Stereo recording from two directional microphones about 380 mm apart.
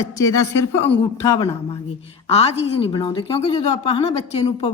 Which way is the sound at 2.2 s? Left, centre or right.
Centre.